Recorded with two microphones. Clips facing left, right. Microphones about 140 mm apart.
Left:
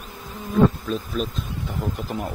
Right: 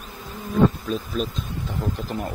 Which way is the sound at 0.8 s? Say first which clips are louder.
Even; centre (ahead or behind).